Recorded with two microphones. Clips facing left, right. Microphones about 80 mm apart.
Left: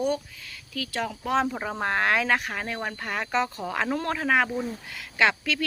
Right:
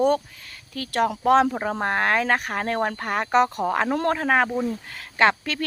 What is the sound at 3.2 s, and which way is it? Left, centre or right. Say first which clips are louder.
Speech: right 7 dB; right.